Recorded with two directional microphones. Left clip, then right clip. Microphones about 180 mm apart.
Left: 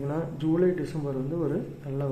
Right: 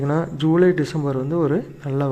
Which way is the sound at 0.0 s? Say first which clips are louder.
Right 8 dB; 40° right (ahead or behind).